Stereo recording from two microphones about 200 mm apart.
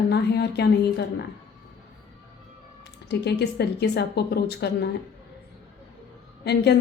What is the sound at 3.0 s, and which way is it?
A woman's voice, 55° left (ahead or behind).